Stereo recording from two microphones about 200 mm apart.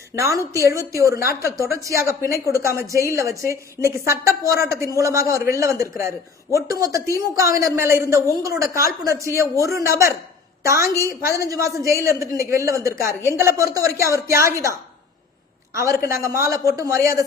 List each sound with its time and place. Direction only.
0.2 s a woman's voice: 15° right (ahead or behind)
16.2 s a woman's voice: 15° right (ahead or behind)